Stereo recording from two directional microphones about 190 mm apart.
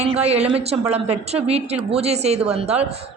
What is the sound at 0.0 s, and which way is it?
Speech, 35° right (ahead or behind).